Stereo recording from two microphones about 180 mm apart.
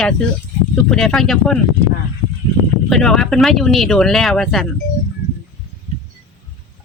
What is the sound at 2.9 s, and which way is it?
Speech, 5° left (ahead or behind).